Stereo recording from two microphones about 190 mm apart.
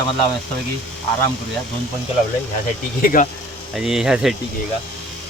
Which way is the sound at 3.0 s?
45° left (ahead or behind).